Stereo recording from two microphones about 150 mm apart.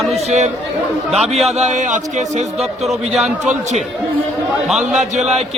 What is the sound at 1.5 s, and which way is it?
Speech, 50° right (ahead or behind).